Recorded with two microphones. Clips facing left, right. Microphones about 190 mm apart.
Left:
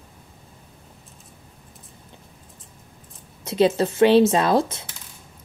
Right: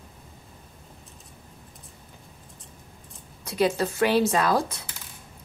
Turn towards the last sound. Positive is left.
turn(degrees=25)  # may be behind; listen again after turning